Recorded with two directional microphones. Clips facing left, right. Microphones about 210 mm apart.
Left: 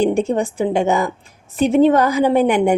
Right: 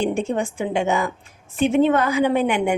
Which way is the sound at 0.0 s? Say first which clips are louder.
Left 5 dB; 35° left (ahead or behind).